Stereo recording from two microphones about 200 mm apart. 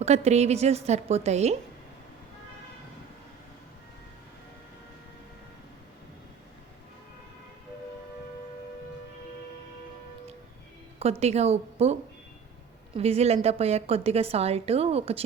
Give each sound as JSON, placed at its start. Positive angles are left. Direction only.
{"t": 0.0, "sound": "a woman's voice", "side_deg": -35}
{"t": 11.2, "sound": "a woman's voice", "side_deg": -30}